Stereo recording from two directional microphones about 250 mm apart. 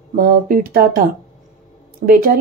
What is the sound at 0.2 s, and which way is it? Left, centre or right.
Speech, right.